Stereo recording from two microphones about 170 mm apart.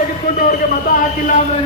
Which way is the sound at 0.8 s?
55° left (ahead or behind).